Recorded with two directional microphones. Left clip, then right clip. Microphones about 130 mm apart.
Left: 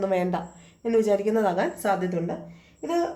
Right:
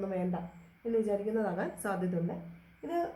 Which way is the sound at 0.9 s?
25° left (ahead or behind).